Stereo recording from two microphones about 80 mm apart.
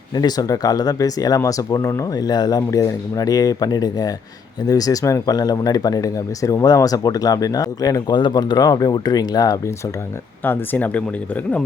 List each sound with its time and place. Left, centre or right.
0.1 s speech: left
2.6 s speech: left
8.1 s speech: left
10.4 s speech: left